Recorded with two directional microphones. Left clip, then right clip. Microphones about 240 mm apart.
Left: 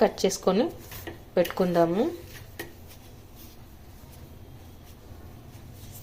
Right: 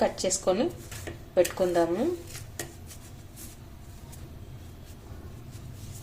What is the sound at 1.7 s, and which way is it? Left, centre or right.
Speech, centre.